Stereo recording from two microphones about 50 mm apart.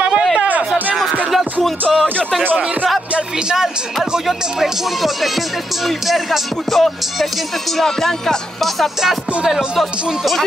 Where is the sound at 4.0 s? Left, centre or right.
Centre.